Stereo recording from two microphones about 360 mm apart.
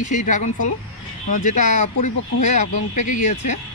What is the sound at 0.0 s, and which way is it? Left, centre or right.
Speech, left.